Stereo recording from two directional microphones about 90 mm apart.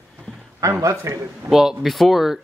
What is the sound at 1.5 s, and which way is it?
Speech, 5° right (ahead or behind).